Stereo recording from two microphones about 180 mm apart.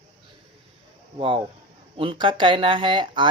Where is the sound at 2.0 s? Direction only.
30° right (ahead or behind).